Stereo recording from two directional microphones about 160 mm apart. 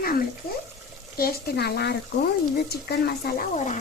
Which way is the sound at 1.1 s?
80° left.